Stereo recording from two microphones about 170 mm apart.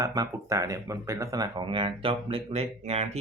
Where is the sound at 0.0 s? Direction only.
20° right (ahead or behind).